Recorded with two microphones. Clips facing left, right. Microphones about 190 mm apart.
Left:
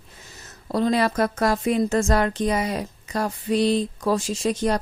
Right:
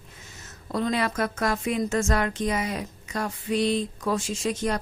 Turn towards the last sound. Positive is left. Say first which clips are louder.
# left 4 dB
turn(degrees=35)  # may be behind; listen again after turning